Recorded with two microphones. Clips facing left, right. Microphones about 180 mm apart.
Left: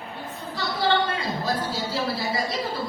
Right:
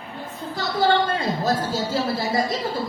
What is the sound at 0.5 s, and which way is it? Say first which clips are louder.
A woman's voice: right 4 dB; 45° right (ahead or behind).